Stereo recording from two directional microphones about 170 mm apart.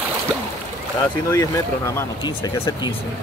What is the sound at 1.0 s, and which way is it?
Speech, 20° left (ahead or behind).